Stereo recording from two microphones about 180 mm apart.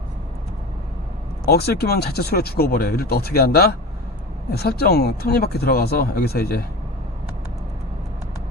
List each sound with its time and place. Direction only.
1.5 s speech: 60° left (ahead or behind)